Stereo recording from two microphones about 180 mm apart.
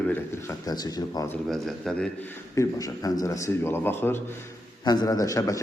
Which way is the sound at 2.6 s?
20° left (ahead or behind).